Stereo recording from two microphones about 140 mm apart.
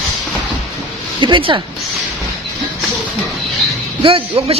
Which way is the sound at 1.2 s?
35° right (ahead or behind).